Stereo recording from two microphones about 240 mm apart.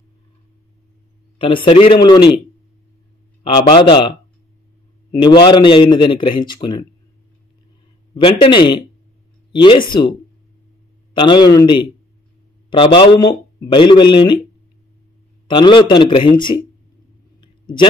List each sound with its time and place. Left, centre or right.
1.4 s speech: left
3.4 s speech: centre
5.2 s speech: centre
8.1 s speech: left
11.1 s a man's voice: centre
15.4 s speech: centre